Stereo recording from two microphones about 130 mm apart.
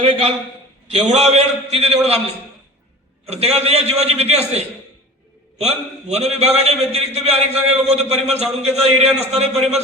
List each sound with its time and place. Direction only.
0.0 s a man's voice: 45° right (ahead or behind)
0.9 s a man's voice: 55° right (ahead or behind)